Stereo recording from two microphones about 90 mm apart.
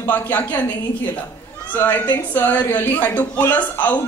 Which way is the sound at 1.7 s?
20° left (ahead or behind).